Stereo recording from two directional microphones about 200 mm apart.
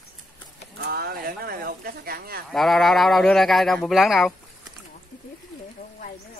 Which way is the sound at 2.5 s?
Centre (ahead or behind).